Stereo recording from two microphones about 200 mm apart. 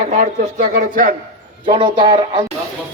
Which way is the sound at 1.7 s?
25° right (ahead or behind).